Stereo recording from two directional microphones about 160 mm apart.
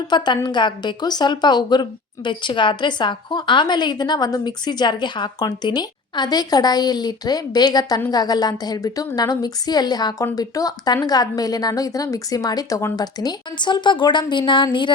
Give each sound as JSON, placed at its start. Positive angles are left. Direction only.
{"t": 0.3, "sound": "a woman's voice", "side_deg": 25}